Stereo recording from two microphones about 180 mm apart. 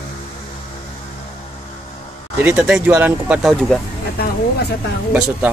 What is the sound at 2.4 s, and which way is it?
Speech, 10° right (ahead or behind).